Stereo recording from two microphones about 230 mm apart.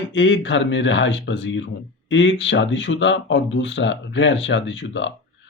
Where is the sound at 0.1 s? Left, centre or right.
Left.